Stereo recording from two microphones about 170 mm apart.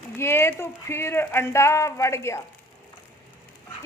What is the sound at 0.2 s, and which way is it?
Speech, 15° left (ahead or behind).